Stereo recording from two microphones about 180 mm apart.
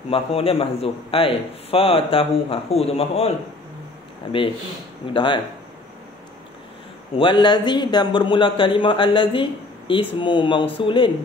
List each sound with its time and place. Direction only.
0.1 s a man's voice: 30° left (ahead or behind)
4.3 s speech: 30° left (ahead or behind)
7.2 s speech: 25° left (ahead or behind)